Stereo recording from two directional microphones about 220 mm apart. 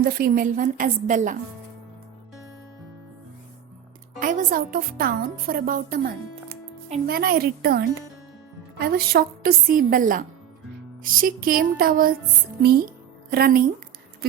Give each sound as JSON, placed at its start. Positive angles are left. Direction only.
{"t": 0.0, "sound": "a woman's voice", "side_deg": -40}
{"t": 4.2, "sound": "a woman's voice", "side_deg": -35}
{"t": 7.1, "sound": "a woman's voice", "side_deg": -45}
{"t": 13.3, "sound": "a woman's voice", "side_deg": -40}